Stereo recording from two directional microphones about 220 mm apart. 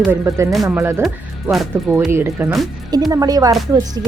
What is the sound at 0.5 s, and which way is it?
Speech, centre (ahead or behind).